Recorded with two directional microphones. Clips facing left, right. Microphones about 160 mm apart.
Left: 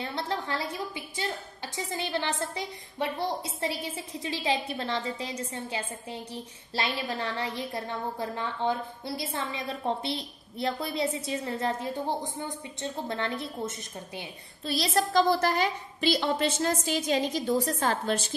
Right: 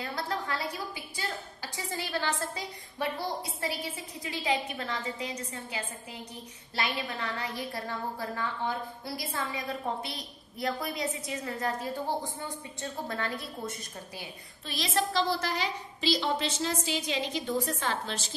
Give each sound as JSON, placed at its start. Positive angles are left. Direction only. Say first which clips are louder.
{"t": 0.0, "sound": "a woman's voice", "louder": "left 2 dB", "side_deg": 25}
{"t": 14.7, "sound": "a woman's voice", "louder": "left 4 dB", "side_deg": 40}